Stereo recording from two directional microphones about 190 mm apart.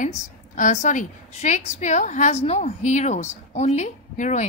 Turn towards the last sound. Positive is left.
turn(degrees=40)  # may be behind; listen again after turning